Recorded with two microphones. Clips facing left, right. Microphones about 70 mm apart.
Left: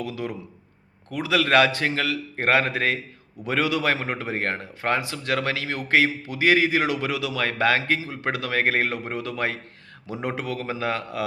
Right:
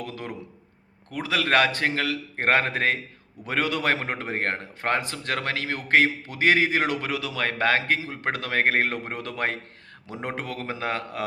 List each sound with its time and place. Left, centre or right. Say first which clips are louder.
0.0 s a man's voice: left 5 dB; right
1.1 s speech: left 3 dB; right
8.2 s a man's voice: right 1 dB; right